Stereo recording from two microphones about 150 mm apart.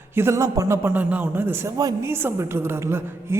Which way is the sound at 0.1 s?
15° right (ahead or behind).